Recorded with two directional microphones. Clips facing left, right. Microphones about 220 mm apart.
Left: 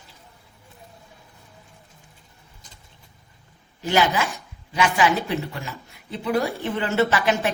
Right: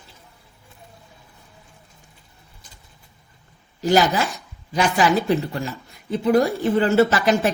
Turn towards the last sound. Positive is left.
turn(degrees=-40)  # may be behind; listen again after turning